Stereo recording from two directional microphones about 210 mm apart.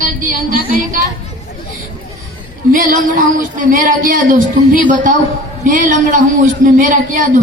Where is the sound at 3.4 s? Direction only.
40° right (ahead or behind).